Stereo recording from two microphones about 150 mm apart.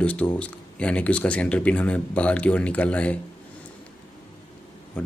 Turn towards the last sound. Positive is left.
turn(degrees=10)  # may be behind; listen again after turning